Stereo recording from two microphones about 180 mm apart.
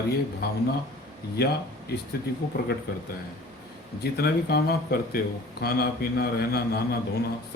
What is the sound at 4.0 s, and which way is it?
A man's voice, 65° left (ahead or behind).